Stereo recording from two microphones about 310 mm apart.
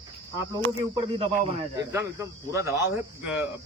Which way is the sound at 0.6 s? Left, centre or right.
Centre.